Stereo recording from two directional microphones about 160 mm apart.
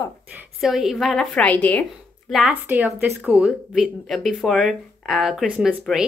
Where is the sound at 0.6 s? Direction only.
Centre (ahead or behind).